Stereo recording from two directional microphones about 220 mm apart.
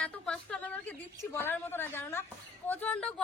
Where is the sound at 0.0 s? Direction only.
5° left (ahead or behind).